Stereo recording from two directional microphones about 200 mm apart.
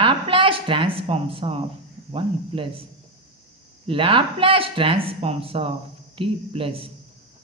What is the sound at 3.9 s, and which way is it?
Speech, 25° right (ahead or behind).